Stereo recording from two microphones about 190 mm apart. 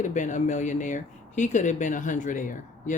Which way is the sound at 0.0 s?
40° left (ahead or behind).